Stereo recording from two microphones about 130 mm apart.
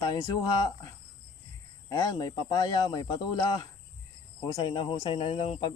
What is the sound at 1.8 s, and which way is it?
Speech, 25° left (ahead or behind).